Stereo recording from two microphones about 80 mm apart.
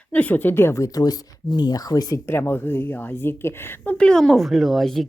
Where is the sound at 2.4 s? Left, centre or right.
Left.